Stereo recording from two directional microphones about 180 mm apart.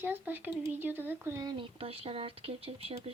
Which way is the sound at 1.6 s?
30° right (ahead or behind).